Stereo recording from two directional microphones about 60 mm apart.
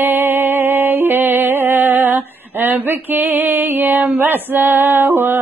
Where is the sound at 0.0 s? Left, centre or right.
Right.